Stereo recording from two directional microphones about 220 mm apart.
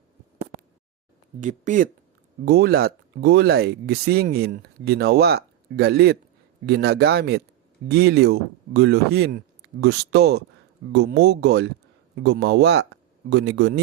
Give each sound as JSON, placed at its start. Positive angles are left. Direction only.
{"t": 1.4, "sound": "speech", "side_deg": -35}